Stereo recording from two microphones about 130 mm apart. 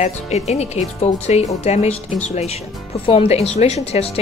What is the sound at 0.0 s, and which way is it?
Speech, 55° left (ahead or behind).